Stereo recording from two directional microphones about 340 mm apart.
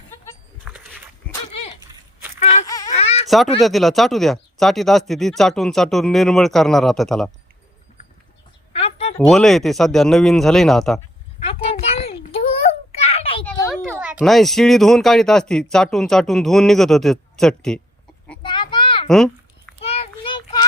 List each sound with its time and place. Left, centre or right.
0.3 s goat: centre
1.3 s dog: centre
2.4 s baby cry: centre
3.2 s speech: centre
8.7 s a sound: centre
9.1 s speech: centre
11.3 s a sound: centre
13.4 s speech: centre
18.3 s a sound: centre
19.0 s babbling: centre
19.8 s child singing: centre